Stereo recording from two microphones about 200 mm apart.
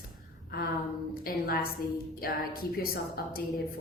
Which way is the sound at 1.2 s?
45° left (ahead or behind).